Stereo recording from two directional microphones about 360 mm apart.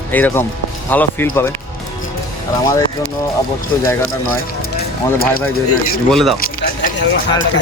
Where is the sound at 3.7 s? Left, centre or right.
Centre.